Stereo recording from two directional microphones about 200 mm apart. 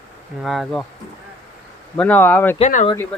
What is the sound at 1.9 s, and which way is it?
Speech, 5° left (ahead or behind).